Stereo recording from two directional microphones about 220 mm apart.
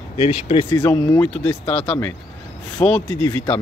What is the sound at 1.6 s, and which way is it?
Speech, 25° left (ahead or behind).